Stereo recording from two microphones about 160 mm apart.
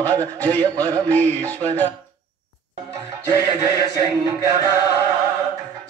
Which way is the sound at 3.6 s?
20° right (ahead or behind).